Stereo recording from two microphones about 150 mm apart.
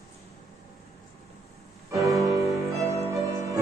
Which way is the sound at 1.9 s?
20° right (ahead or behind).